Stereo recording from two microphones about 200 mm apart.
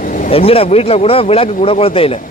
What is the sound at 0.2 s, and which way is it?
Speech, 30° left (ahead or behind).